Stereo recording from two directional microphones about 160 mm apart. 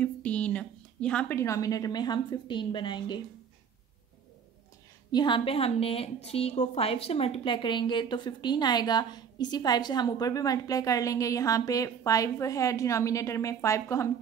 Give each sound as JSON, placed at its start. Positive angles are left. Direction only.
{"t": 0.0, "sound": "a sound", "side_deg": 10}
{"t": 1.4, "sound": "a woman's voice", "side_deg": 20}
{"t": 5.1, "sound": "a woman's voice", "side_deg": 30}